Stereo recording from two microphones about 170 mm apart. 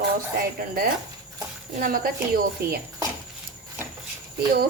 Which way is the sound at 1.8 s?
60° right (ahead or behind).